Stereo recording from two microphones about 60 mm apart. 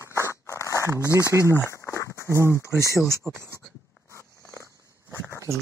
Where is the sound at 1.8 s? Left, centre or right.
Left.